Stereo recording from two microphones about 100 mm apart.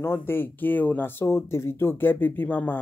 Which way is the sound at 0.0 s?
25° left (ahead or behind).